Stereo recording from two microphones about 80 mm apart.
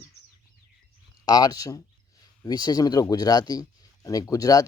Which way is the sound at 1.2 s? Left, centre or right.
Left.